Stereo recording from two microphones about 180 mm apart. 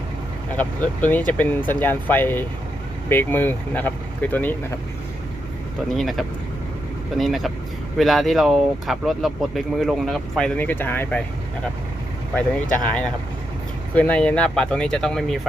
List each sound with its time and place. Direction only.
0.5 s speech: 10° left (ahead or behind)
5.9 s speech: centre (ahead or behind)
12.8 s speech: 5° left (ahead or behind)